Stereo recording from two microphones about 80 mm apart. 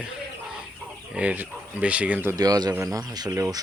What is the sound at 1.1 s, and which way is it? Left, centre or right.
Speech, centre.